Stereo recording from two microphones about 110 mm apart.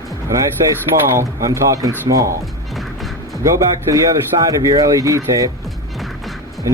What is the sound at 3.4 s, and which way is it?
Speech, 30° right (ahead or behind).